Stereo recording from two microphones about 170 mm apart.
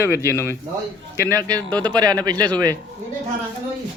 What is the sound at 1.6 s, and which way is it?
Speech, 5° left (ahead or behind).